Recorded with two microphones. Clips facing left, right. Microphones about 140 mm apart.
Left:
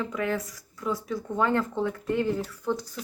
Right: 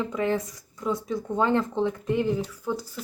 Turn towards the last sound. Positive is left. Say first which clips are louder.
# left 1 dB
turn(degrees=-10)  # may be behind; listen again after turning